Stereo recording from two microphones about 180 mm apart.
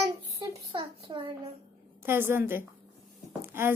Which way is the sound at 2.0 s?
15° right (ahead or behind).